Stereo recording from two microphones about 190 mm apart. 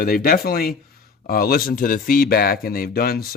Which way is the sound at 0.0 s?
50° left (ahead or behind).